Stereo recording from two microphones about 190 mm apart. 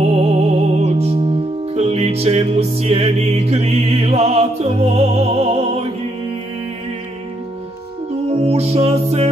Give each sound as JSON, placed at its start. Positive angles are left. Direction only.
{"t": 0.0, "sound": "music", "side_deg": -35}
{"t": 8.1, "sound": "music", "side_deg": -35}